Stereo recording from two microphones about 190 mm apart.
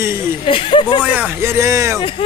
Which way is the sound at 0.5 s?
25° left (ahead or behind).